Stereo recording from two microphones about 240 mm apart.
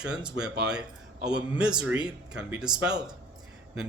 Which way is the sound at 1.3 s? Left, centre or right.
Centre.